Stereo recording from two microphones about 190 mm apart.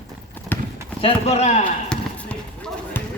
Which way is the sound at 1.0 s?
30° left (ahead or behind).